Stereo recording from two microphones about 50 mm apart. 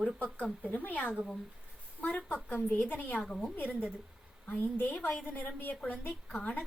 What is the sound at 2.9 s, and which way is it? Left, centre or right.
Speech, left.